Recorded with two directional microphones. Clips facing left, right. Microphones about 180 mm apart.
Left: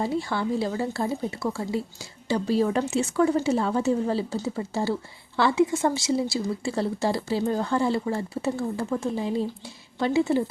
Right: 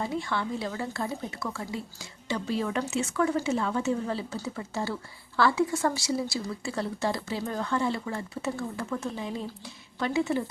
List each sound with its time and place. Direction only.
0.0 s speech: 35° left (ahead or behind)